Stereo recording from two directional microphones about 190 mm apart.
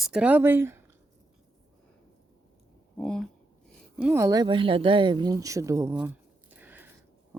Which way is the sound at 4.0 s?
15° right (ahead or behind).